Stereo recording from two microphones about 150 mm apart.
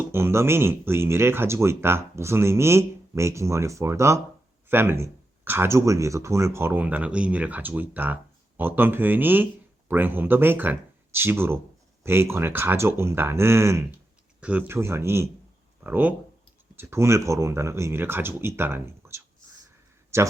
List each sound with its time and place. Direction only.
0.1 s speech: 15° right (ahead or behind)